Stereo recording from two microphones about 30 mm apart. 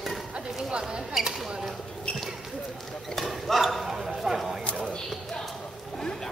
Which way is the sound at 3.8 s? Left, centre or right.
Centre.